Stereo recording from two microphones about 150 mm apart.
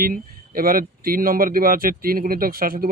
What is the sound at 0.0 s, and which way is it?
Speech, 75° right (ahead or behind).